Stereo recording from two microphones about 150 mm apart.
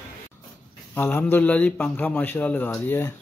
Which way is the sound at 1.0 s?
10° left (ahead or behind).